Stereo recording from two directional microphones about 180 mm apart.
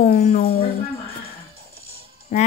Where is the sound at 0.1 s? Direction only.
55° left (ahead or behind).